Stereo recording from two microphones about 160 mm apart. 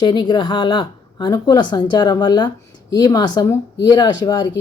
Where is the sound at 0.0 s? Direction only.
30° left (ahead or behind).